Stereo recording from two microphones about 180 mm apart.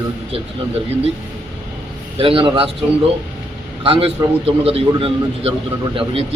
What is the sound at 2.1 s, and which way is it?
Speech, 30° right (ahead or behind).